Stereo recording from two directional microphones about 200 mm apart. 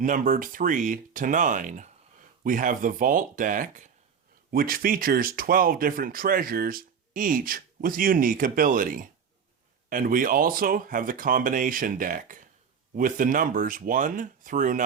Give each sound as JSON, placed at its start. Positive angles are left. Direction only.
{"t": 0.0, "sound": "speech", "side_deg": -40}